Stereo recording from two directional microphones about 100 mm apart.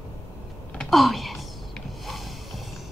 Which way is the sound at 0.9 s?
Centre (ahead or behind).